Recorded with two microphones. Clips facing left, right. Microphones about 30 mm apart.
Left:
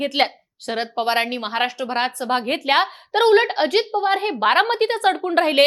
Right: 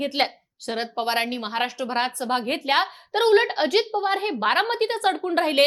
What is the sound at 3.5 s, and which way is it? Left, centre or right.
Speech, left.